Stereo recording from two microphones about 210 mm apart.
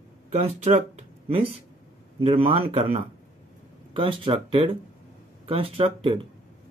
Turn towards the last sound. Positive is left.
turn(degrees=-25)  # may be behind; listen again after turning